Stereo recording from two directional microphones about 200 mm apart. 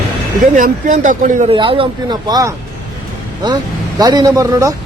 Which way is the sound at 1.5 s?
25° right (ahead or behind).